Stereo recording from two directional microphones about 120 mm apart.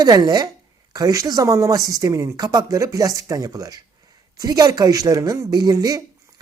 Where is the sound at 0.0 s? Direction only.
35° right (ahead or behind).